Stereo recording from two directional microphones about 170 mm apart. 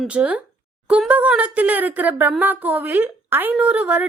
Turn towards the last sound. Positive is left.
turn(degrees=-10)  # may be behind; listen again after turning